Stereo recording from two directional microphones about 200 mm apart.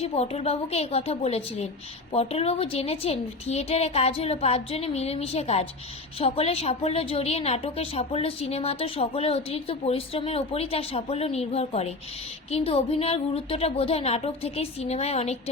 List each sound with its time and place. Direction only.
0.0 s a woman's voice: 30° left (ahead or behind)